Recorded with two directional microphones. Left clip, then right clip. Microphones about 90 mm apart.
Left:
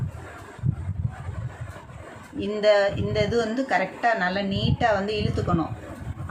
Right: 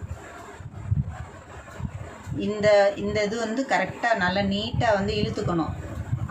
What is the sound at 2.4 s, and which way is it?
Speech, 30° left (ahead or behind).